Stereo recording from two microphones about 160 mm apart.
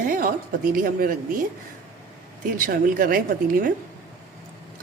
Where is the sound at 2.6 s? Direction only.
65° right (ahead or behind).